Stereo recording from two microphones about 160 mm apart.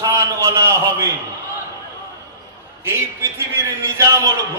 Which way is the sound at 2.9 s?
15° right (ahead or behind).